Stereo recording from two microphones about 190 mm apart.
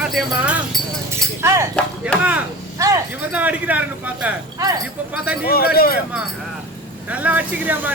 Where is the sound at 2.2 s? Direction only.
10° right (ahead or behind).